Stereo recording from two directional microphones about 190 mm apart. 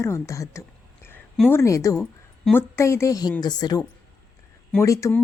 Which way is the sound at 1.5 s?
15° left (ahead or behind).